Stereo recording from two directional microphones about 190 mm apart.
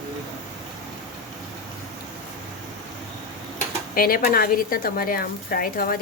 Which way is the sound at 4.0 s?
50° left (ahead or behind).